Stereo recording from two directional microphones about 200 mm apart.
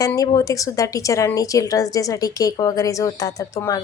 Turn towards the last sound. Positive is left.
turn(degrees=15)  # may be behind; listen again after turning